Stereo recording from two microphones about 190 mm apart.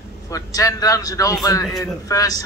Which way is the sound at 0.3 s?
20° left (ahead or behind).